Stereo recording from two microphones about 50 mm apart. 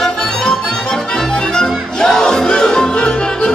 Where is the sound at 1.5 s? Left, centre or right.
Centre.